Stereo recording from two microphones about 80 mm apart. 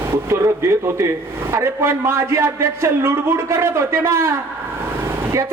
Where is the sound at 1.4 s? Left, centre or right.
Right.